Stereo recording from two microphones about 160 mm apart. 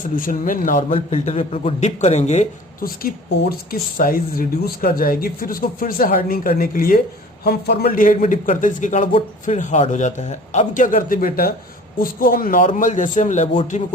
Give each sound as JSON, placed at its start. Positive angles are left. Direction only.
{"t": 0.2, "sound": "speech", "side_deg": 55}
{"t": 0.8, "sound": "speech", "side_deg": 35}
{"t": 3.7, "sound": "speech", "side_deg": 65}
{"t": 7.4, "sound": "a man's voice", "side_deg": 80}
{"t": 8.2, "sound": "speech", "side_deg": 50}